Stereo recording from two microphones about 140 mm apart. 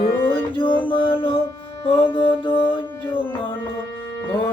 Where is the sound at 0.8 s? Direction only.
35° left (ahead or behind).